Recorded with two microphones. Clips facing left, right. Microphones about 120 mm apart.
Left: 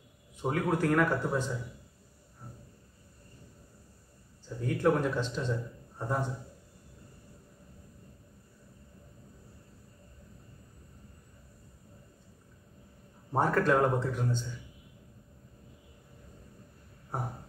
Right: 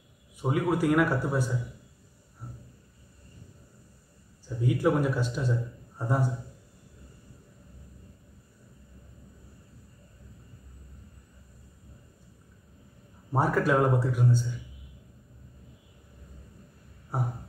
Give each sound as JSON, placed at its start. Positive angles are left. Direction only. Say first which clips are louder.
{"t": 0.4, "sound": "speech", "louder": "right 3 dB", "side_deg": -10}
{"t": 4.6, "sound": "a man's voice", "louder": "right 2 dB", "side_deg": -10}
{"t": 13.3, "sound": "speech", "louder": "right 1 dB", "side_deg": -5}